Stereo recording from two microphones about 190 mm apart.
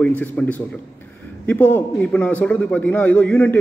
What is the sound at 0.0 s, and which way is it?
A man's voice, 10° left (ahead or behind).